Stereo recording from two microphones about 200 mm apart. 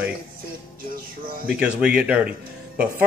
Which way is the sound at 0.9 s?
45° right (ahead or behind).